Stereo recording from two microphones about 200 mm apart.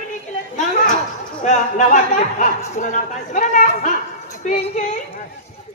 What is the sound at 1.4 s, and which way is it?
Speech, 40° left (ahead or behind).